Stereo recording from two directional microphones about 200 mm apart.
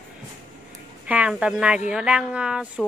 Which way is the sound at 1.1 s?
5° right (ahead or behind).